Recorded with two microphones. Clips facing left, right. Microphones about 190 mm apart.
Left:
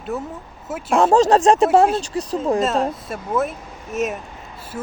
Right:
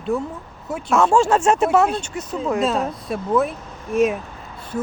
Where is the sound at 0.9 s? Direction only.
35° left (ahead or behind).